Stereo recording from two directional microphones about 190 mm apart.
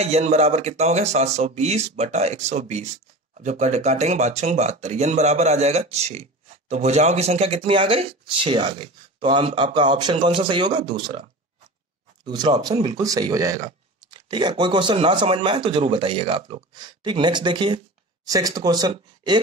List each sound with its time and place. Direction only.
0.0 s speech: 35° right (ahead or behind)
12.3 s speech: 25° right (ahead or behind)